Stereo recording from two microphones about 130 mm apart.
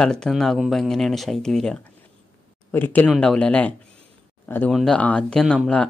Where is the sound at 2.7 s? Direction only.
15° left (ahead or behind).